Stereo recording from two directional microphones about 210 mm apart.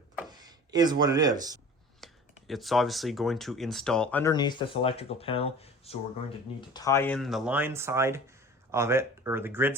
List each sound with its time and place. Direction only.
0.3 s speech: 20° right (ahead or behind)
2.0 s a sound: centre (ahead or behind)
2.5 s speech: centre (ahead or behind); by 6.0 s 30° left (ahead or behind)
6.6 s speech: 15° left (ahead or behind); by 9.7 s 10° right (ahead or behind)